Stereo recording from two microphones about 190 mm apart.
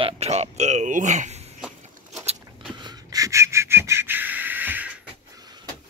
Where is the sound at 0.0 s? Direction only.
35° right (ahead or behind).